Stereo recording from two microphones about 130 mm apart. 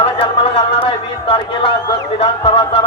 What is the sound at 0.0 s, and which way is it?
A man's voice, 45° left (ahead or behind).